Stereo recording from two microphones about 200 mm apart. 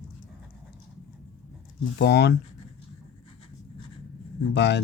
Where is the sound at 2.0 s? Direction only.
60° left (ahead or behind).